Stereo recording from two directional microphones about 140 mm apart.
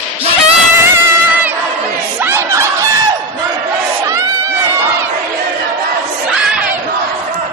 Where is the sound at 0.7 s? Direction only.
20° right (ahead or behind).